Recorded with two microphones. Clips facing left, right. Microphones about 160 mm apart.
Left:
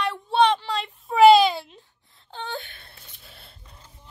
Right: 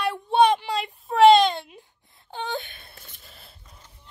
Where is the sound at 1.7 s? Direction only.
15° right (ahead or behind).